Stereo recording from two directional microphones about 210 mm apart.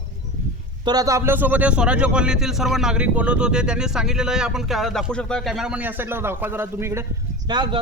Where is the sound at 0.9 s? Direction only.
15° right (ahead or behind).